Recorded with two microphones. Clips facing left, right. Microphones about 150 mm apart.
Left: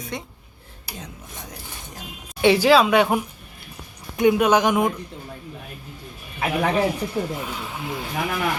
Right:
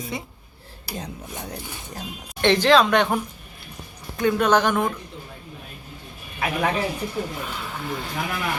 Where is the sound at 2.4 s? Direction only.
10° left (ahead or behind).